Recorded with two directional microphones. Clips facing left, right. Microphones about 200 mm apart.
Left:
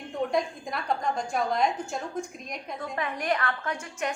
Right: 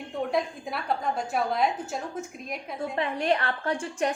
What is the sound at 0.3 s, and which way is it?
A woman's voice, 5° right (ahead or behind).